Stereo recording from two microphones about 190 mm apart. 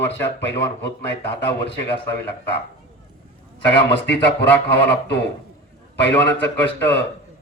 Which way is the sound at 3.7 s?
65° left (ahead or behind).